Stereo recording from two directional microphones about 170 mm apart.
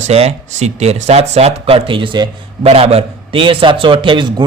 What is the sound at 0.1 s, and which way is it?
A man's voice, 40° right (ahead or behind).